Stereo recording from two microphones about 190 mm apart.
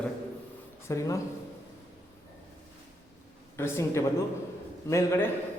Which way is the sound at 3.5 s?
15° left (ahead or behind).